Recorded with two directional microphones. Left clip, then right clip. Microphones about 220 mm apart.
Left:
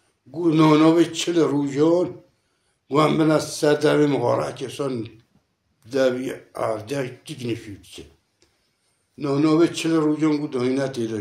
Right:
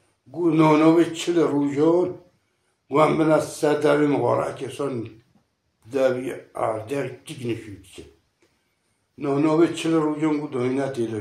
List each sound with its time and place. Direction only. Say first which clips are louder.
0.3 s speech: left 1 dB; 50° left (ahead or behind)
9.2 s speech: left 1 dB; 50° left (ahead or behind)